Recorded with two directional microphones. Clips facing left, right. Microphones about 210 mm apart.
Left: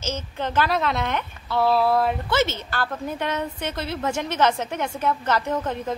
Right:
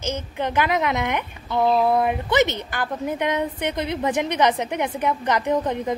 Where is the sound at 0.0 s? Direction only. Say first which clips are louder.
Right 2 dB; 15° right (ahead or behind).